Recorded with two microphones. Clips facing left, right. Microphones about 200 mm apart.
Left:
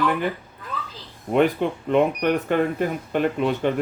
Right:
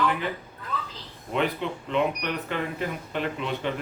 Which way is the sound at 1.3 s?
50° left (ahead or behind).